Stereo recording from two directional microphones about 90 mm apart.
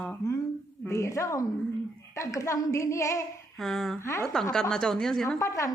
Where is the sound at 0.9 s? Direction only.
35° left (ahead or behind).